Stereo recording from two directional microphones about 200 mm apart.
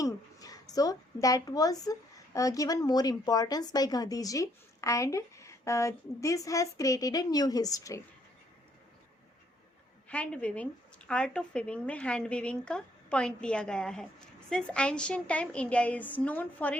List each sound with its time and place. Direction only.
0.0 s a woman's voice: 20° left (ahead or behind)
10.1 s speech: 5° left (ahead or behind)